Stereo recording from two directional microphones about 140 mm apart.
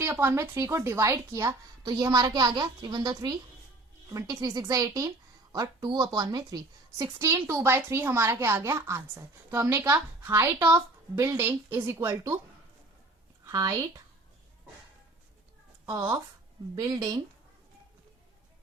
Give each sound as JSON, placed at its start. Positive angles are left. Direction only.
{"t": 0.0, "sound": "a woman's voice", "side_deg": -15}
{"t": 13.4, "sound": "speech", "side_deg": -25}
{"t": 15.9, "sound": "a woman's voice", "side_deg": -25}